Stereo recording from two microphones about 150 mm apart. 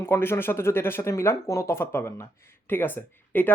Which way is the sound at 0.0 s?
15° left (ahead or behind).